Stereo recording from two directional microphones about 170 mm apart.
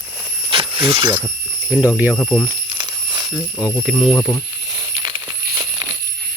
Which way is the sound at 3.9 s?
Centre (ahead or behind).